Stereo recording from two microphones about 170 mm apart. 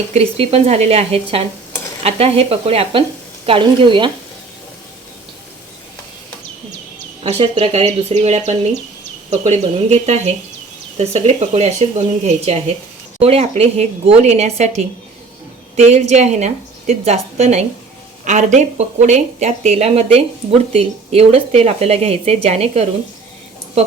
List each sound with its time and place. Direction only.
0.1 s speech: 35° right (ahead or behind)
7.3 s speech: 35° right (ahead or behind)